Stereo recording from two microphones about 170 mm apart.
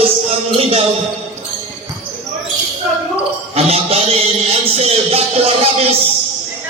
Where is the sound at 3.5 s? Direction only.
35° right (ahead or behind).